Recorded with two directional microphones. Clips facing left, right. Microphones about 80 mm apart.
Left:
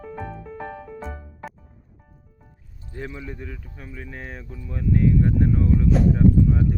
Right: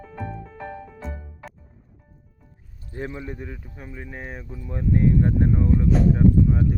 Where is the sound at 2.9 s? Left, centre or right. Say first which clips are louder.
Right 2 dB; right.